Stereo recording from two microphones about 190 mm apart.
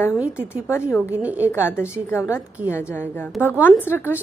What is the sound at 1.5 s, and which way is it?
A woman's voice, 15° left (ahead or behind).